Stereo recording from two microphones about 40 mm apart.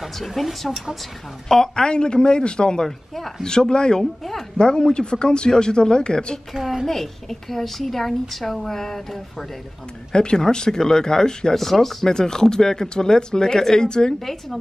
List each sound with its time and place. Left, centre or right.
0.0 s speech: centre
1.5 s speech: centre
4.0 s speech: centre
4.6 s speech: left
6.6 s a woman's voice: centre
6.9 s a woman's voice: centre
10.1 s a woman's voice: centre
12.1 s a woman's voice: centre